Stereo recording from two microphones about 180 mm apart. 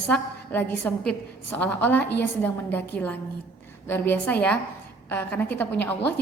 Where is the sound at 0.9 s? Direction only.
10° left (ahead or behind).